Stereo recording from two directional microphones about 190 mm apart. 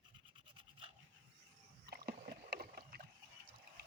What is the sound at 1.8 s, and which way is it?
Rowboat, 55° right (ahead or behind).